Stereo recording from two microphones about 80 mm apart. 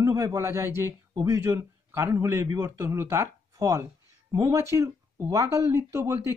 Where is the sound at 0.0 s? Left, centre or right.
Right.